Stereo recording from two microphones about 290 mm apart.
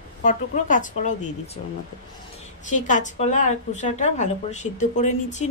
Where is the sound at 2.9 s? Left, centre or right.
Left.